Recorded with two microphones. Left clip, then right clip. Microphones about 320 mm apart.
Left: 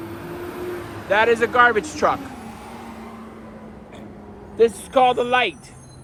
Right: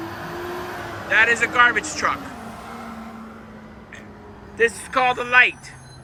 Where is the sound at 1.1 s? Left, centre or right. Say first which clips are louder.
Even; centre.